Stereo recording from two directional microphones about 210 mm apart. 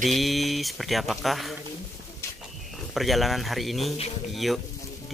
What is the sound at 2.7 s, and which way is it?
Speech, centre (ahead or behind).